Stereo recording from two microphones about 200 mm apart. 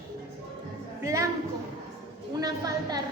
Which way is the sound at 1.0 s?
15° right (ahead or behind).